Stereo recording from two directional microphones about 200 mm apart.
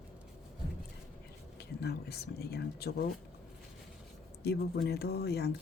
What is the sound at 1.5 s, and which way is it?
Speech, 55° left (ahead or behind).